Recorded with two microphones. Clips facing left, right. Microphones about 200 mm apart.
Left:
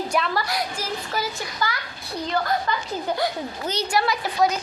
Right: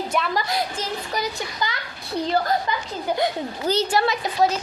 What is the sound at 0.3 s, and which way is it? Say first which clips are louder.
A child's voice: right 1 dB; 20° right (ahead or behind).